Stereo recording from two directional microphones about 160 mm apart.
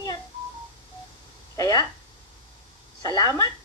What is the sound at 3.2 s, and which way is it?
Speech, 20° left (ahead or behind).